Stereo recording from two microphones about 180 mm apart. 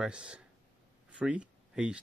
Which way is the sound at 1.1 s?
5° right (ahead or behind).